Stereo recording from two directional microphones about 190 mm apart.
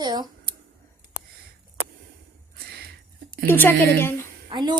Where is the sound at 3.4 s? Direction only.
10° left (ahead or behind).